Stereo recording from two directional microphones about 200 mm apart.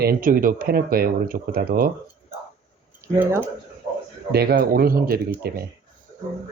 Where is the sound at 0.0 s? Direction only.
45° right (ahead or behind).